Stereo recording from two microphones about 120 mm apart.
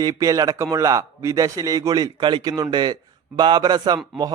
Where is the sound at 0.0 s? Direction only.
30° right (ahead or behind).